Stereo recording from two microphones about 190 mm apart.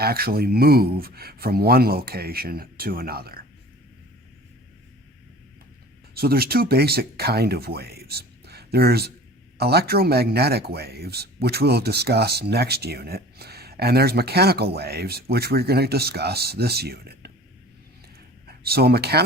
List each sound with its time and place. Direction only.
0.0 s speech: 55° right (ahead or behind)
6.1 s speech: 55° right (ahead or behind)
18.4 s speech: 55° right (ahead or behind)